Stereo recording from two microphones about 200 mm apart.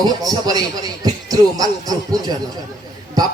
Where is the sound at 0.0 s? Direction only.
20° right (ahead or behind).